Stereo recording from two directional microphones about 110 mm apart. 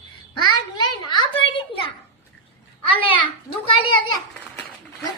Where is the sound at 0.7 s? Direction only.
45° left (ahead or behind).